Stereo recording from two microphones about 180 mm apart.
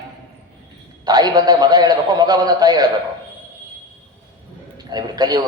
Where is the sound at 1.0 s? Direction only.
20° right (ahead or behind).